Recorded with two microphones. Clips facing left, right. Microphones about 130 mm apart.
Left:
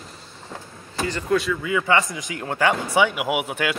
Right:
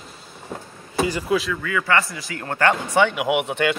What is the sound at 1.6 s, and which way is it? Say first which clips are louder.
A man's voice: left 1 dB; 15° left (ahead or behind).